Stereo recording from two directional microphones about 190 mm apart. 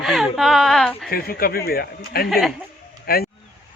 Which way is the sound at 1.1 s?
50° left (ahead or behind).